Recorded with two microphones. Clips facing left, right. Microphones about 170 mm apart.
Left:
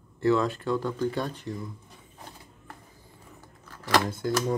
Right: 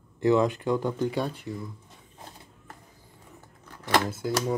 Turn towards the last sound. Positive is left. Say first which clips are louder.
# left 1 dB
turn(degrees=-5)  # may be behind; listen again after turning